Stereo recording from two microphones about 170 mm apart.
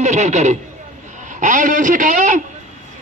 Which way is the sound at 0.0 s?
45° right (ahead or behind).